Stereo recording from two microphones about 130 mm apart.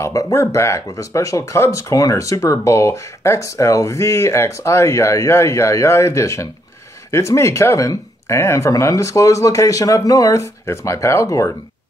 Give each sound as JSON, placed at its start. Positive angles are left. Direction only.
{"t": 0.0, "sound": "speech", "side_deg": 25}